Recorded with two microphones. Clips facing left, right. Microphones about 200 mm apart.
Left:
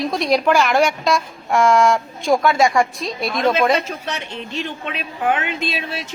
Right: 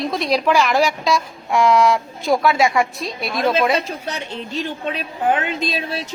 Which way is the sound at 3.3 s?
30° right (ahead or behind).